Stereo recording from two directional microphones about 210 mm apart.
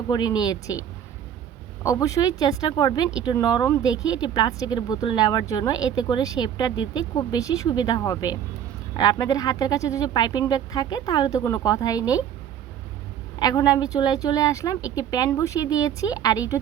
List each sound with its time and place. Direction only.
0.1 s speech: 20° left (ahead or behind)
1.8 s speech: 15° left (ahead or behind)
13.4 s speech: 20° left (ahead or behind)